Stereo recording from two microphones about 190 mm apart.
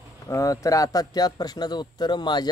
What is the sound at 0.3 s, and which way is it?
Speech, 15° left (ahead or behind).